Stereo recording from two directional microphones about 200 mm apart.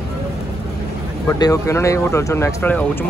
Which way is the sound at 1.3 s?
15° left (ahead or behind).